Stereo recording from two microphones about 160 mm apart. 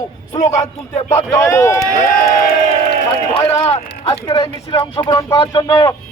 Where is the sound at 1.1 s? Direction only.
20° left (ahead or behind).